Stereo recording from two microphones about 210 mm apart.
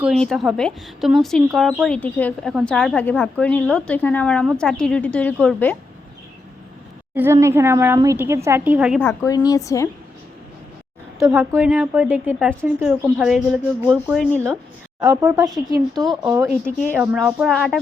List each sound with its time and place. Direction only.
0.0 s a woman's voice: centre (ahead or behind)
7.2 s a woman's voice: 15° right (ahead or behind)
9.0 s a woman's voice: 15° left (ahead or behind)
11.2 s a woman's voice: 10° right (ahead or behind); by 14.5 s 5° left (ahead or behind)
15.0 s a woman's voice: 15° right (ahead or behind)
17.2 s a woman's voice: centre (ahead or behind)